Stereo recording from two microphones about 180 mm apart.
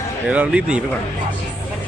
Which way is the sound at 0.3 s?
5° right (ahead or behind).